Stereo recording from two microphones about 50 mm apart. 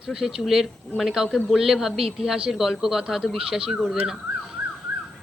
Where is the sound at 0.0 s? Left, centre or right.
Centre.